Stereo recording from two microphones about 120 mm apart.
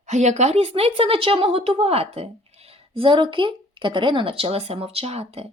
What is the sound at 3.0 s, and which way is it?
A woman's voice, 45° right (ahead or behind).